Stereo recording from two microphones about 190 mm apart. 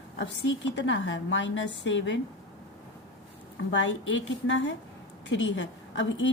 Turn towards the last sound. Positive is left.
turn(degrees=75)  # may be behind; listen again after turning